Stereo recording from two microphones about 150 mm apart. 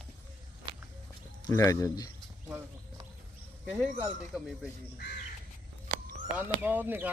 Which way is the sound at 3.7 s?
5° right (ahead or behind).